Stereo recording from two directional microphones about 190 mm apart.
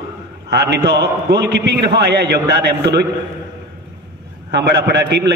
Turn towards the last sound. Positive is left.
turn(degrees=-65)  # may be behind; listen again after turning